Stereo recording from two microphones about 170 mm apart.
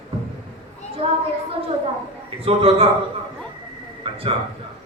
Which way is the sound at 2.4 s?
35° right (ahead or behind).